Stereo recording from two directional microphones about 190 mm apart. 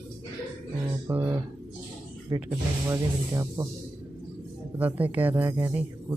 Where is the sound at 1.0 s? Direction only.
10° right (ahead or behind).